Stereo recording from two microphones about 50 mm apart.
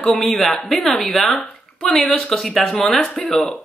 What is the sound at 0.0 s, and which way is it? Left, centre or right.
A woman's voice, centre.